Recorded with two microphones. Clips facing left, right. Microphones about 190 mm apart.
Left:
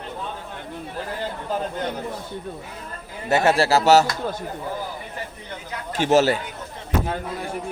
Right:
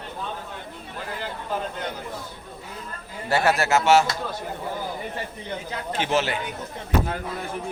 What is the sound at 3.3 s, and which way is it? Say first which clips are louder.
Speech: left 3 dB; 25° left (ahead or behind).